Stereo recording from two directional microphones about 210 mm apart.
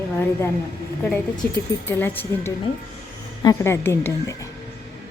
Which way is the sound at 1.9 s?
10° left (ahead or behind).